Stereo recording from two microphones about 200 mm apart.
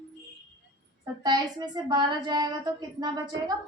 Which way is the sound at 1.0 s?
20° right (ahead or behind).